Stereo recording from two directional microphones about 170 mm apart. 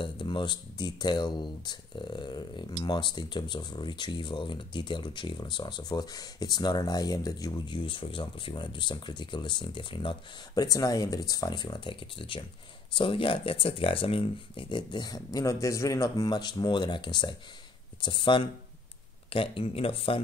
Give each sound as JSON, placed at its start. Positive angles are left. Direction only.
{"t": 0.0, "sound": "speech", "side_deg": 30}